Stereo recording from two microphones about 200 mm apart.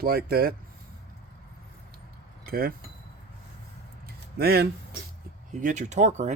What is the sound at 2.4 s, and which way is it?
Speech, 50° right (ahead or behind).